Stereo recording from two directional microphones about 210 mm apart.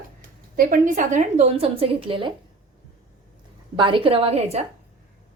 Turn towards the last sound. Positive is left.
turn(degrees=-30)  # may be behind; listen again after turning